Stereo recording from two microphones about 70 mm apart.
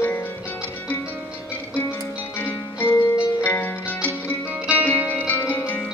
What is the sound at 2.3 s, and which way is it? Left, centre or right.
Music, left.